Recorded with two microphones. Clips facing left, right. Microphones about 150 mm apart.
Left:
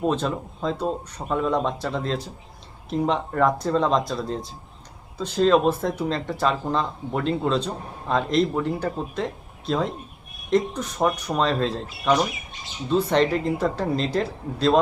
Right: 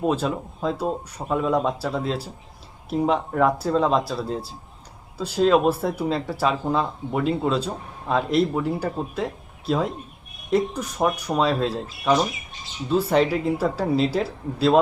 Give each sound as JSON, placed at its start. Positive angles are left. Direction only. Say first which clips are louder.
{"t": 0.0, "sound": "speech", "louder": "right 1 dB", "side_deg": -5}